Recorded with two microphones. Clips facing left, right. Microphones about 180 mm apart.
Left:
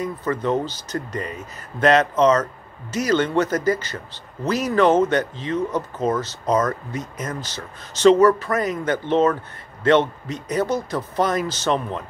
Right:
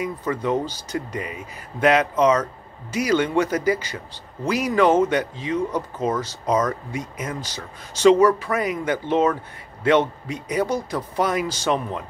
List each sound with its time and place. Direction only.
0.0 s a man's voice: 10° right (ahead or behind)